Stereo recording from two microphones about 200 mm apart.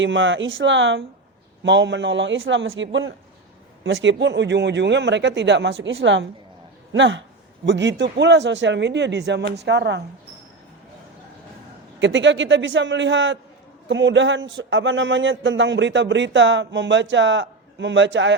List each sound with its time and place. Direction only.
0.0 s a man's voice: 70° right (ahead or behind)
11.9 s a man's voice: 65° right (ahead or behind)